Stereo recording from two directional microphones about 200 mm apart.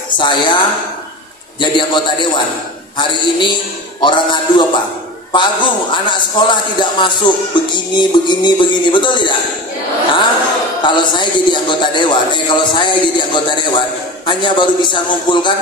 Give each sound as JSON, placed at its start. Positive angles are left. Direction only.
{"t": 0.2, "sound": "a man's voice", "side_deg": 20}
{"t": 10.8, "sound": "a man's voice", "side_deg": 25}